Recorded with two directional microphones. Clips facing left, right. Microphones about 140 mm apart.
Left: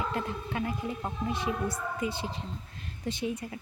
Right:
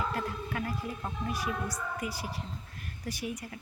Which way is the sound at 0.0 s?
20° left (ahead or behind).